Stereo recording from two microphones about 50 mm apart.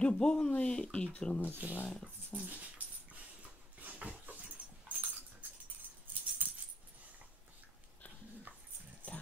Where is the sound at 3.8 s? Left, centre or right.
Right.